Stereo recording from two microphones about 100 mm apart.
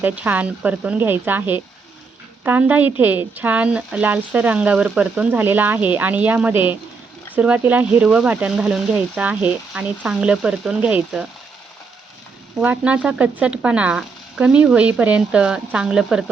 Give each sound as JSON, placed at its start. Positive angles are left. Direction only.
{"t": 0.0, "sound": "speech", "side_deg": -15}
{"t": 12.5, "sound": "speech", "side_deg": -15}